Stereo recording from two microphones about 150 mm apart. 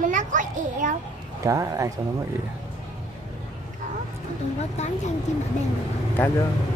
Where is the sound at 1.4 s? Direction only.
20° right (ahead or behind).